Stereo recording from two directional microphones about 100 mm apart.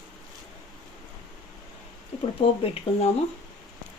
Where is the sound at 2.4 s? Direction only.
80° left.